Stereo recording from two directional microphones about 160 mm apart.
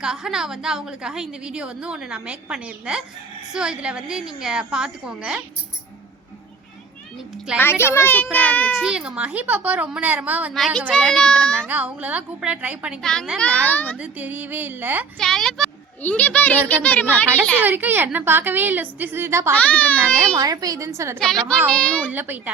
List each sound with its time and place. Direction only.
0.0 s a woman's voice: 5° right (ahead or behind)
7.6 s a child's voice: 15° left (ahead or behind)
8.8 s a woman's voice: 5° right (ahead or behind)
10.5 s a woman's voice: centre (ahead or behind)
11.7 s a woman's voice: 10° right (ahead or behind); by 13.9 s 10° left (ahead or behind)
14.0 s a woman's voice: 10° right (ahead or behind)
15.2 s a child's voice: 5° left (ahead or behind)
17.6 s a woman's voice: 10° right (ahead or behind)
19.5 s a child's voice: 10° left (ahead or behind)
20.3 s a woman's voice: 20° right (ahead or behind)
21.2 s a woman's voice: 5° left (ahead or behind)
22.1 s a woman's voice: 10° right (ahead or behind)